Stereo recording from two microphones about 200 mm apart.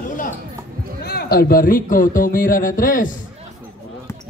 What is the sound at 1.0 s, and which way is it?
Speech, 50° left (ahead or behind).